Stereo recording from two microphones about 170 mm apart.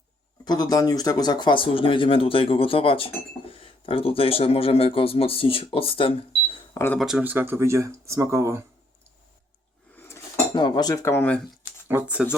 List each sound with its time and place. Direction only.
0.4 s speech: 25° left (ahead or behind)
6.7 s speech: 15° left (ahead or behind)
7.0 s speech: 5° right (ahead or behind)
9.9 s cutlery: 10° left (ahead or behind)
10.5 s cutlery: 30° left (ahead or behind); by 11.3 s 10° left (ahead or behind)
11.9 s speech: 10° right (ahead or behind)